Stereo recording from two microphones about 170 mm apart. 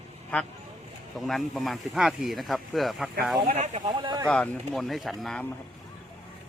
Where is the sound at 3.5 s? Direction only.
40° right (ahead or behind).